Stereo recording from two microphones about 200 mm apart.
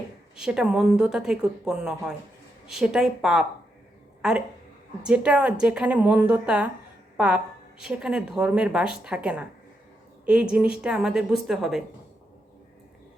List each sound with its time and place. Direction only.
0.3 s a woman's voice: 5° right (ahead or behind)